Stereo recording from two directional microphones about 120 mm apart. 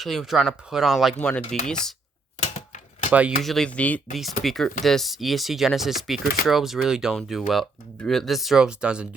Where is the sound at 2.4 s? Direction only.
60° left (ahead or behind).